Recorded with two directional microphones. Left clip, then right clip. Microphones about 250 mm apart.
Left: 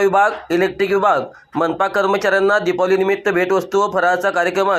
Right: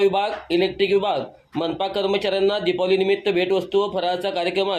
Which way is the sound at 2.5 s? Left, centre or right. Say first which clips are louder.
Left 5 dB; left.